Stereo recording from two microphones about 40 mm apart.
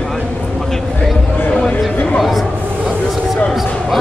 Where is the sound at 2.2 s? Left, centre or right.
Centre.